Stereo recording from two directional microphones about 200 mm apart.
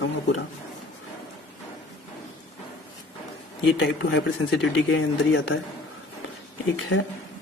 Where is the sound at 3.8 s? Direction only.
65° left (ahead or behind).